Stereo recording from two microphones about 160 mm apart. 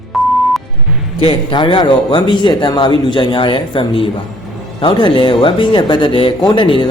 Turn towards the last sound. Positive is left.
turn(degrees=30)  # may be behind; listen again after turning